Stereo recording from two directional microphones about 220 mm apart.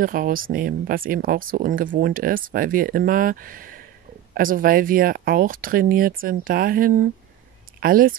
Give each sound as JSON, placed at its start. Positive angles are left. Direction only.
{"t": 0.0, "sound": "speech", "side_deg": -40}